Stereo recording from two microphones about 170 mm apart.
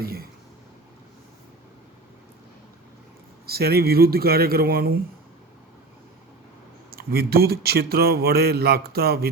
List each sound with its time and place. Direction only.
0.0 s a sound: 60° right (ahead or behind)
3.4 s speech: 65° right (ahead or behind)
6.9 s a man's voice: 65° right (ahead or behind)